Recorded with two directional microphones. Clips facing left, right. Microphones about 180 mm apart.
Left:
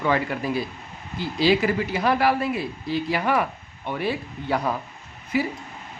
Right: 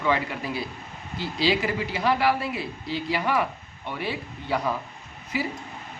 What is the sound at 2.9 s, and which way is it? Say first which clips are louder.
Speech: left 3 dB; 50° left (ahead or behind).